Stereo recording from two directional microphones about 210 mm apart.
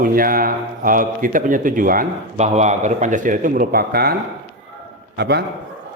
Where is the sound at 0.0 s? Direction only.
45° right (ahead or behind).